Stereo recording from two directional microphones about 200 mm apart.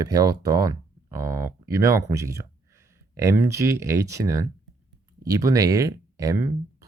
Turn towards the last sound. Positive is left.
turn(degrees=-15)  # may be behind; listen again after turning